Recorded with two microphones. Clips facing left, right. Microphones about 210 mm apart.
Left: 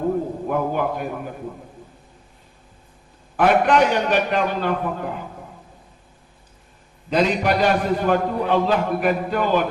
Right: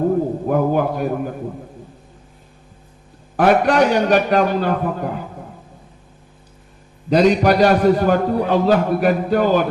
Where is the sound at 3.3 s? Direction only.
40° right (ahead or behind).